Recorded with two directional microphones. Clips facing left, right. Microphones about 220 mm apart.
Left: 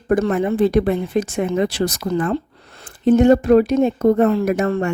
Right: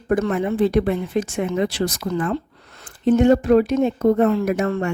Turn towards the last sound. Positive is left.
turn(degrees=40)  # may be behind; listen again after turning